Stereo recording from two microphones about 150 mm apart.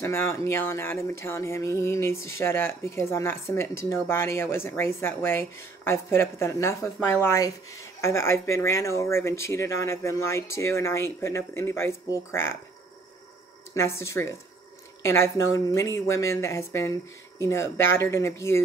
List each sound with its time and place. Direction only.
0.0 s speech: 15° left (ahead or behind)
13.7 s speech: 20° left (ahead or behind)